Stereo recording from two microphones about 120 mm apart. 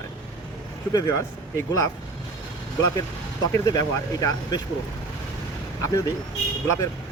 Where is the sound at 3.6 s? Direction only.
30° left (ahead or behind).